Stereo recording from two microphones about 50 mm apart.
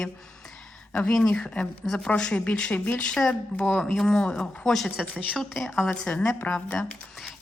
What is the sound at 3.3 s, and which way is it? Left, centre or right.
Speech, left.